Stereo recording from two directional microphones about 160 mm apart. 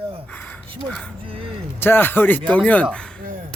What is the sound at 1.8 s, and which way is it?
Speech, 15° left (ahead or behind).